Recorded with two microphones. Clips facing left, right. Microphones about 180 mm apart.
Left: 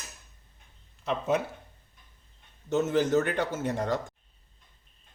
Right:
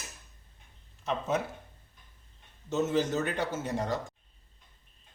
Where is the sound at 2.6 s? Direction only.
55° left (ahead or behind).